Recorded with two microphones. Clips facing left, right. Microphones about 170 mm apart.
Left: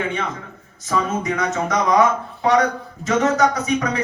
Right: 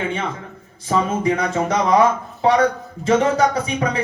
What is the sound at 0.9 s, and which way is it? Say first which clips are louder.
Speech: right 3 dB; 30° right (ahead or behind).